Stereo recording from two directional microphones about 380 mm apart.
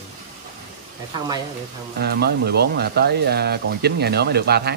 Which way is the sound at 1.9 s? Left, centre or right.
Right.